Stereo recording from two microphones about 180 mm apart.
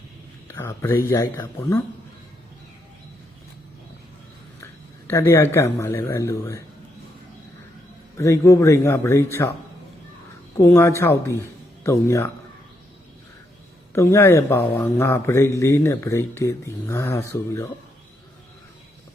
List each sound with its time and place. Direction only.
0.4 s speech: 15° left (ahead or behind)
4.6 s speech: 15° left (ahead or behind)
8.1 s speech: 15° left (ahead or behind)
10.6 s speech: 15° left (ahead or behind)
13.9 s speech: 15° left (ahead or behind)